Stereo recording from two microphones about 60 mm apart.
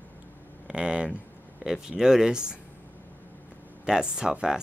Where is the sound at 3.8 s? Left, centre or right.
Centre.